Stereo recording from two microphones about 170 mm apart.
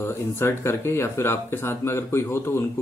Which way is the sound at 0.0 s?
15° left (ahead or behind).